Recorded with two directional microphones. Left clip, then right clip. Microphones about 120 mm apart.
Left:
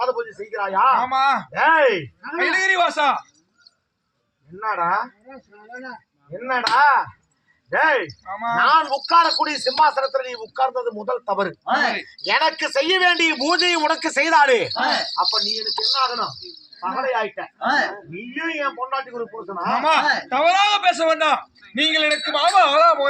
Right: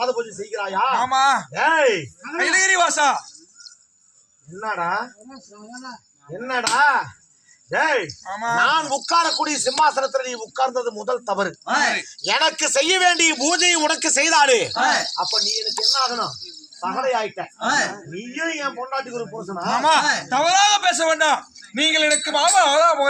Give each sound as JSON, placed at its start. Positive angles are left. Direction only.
{"t": 0.0, "sound": "a sound", "side_deg": -15}
{"t": 0.6, "sound": "a man's voice", "side_deg": -10}
{"t": 0.9, "sound": "a man's voice", "side_deg": 20}
{"t": 1.5, "sound": "a man's voice", "side_deg": -10}
{"t": 2.3, "sound": "a man's voice", "side_deg": 15}
{"t": 4.8, "sound": "speech", "side_deg": -20}
{"t": 6.5, "sound": "a man's voice", "side_deg": -15}
{"t": 8.2, "sound": "a man's voice", "side_deg": 15}
{"t": 8.5, "sound": "a man's voice", "side_deg": -10}
{"t": 15.8, "sound": "a man's voice", "side_deg": 0}
{"t": 19.6, "sound": "a man's voice", "side_deg": 15}